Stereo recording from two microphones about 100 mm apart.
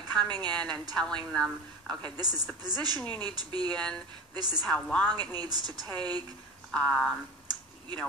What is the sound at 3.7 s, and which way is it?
Speech, 10° left (ahead or behind).